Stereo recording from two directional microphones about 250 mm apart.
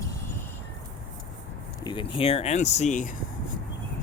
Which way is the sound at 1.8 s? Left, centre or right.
Centre.